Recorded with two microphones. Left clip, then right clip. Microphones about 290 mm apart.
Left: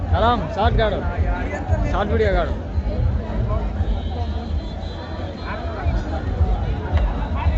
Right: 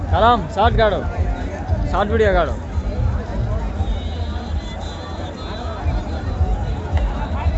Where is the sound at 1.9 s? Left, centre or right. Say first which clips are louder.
Right 4 dB; centre.